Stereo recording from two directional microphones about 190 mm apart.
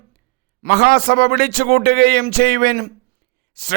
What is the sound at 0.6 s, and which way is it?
A man's voice, 55° right (ahead or behind).